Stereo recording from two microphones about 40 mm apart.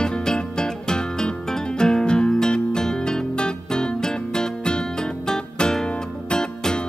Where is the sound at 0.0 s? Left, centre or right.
Centre.